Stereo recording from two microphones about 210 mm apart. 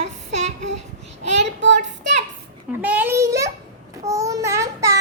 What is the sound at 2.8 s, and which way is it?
Speech, 10° right (ahead or behind).